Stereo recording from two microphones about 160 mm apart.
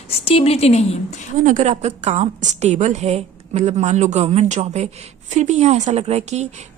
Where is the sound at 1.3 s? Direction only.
55° right (ahead or behind).